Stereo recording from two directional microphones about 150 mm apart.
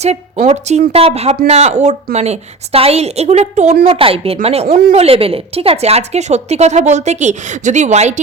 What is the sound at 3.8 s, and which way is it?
A woman's voice, 40° right (ahead or behind).